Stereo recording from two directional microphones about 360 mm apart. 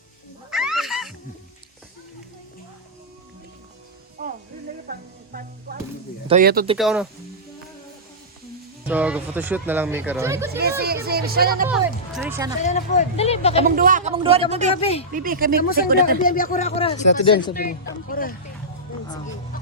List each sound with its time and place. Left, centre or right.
0.5 s cat: centre
4.2 s music: right
6.2 s speech: right
6.7 s speech: centre
8.9 s speech: centre
10.6 s speech: right
11.7 s speech: centre
12.6 s speech: centre
13.7 s speech: right
14.8 s speech: centre
15.1 s speech: right
16.2 s speech: left
19.0 s speech: centre